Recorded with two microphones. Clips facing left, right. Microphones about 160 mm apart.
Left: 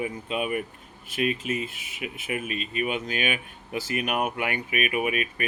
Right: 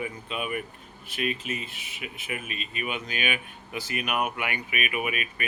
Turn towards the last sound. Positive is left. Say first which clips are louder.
# left 4 dB
turn(degrees=40)  # may be behind; listen again after turning